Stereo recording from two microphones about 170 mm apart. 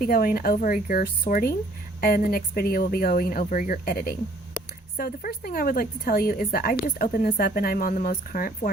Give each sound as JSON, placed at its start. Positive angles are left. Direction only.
{"t": 0.0, "sound": "a woman's voice", "side_deg": 60}